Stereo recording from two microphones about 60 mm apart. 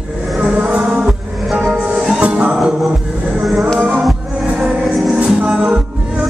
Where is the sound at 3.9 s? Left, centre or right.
Centre.